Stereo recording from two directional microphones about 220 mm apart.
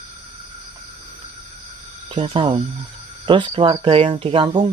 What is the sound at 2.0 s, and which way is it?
Speech, 20° right (ahead or behind).